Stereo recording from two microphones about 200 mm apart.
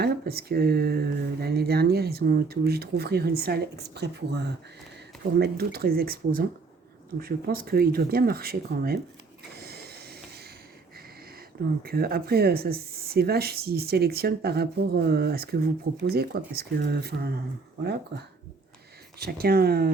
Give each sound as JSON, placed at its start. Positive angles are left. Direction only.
{"t": 0.0, "sound": "speech", "side_deg": -50}
{"t": 9.6, "sound": "a sound", "side_deg": -50}
{"t": 11.8, "sound": "speech", "side_deg": -50}
{"t": 19.2, "sound": "speech", "side_deg": -50}